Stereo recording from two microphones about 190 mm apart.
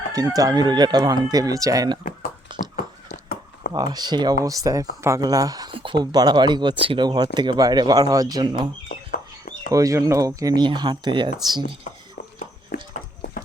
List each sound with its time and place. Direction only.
0.1 s speech: 20° right (ahead or behind)
2.5 s a sound: 25° right (ahead or behind)
3.7 s speech: 20° right (ahead or behind)
9.7 s speech: 15° right (ahead or behind)